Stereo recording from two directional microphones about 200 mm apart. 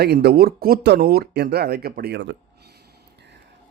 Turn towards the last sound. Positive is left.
turn(degrees=-55)  # may be behind; listen again after turning